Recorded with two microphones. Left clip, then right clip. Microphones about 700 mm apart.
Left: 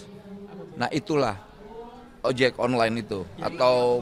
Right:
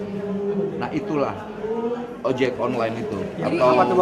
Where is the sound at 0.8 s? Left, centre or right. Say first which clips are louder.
Right 1 dB; left.